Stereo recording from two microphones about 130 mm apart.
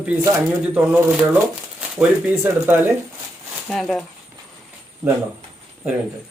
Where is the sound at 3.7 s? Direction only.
5° left (ahead or behind).